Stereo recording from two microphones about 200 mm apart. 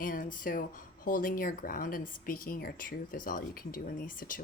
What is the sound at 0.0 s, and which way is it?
Speech, 45° left (ahead or behind).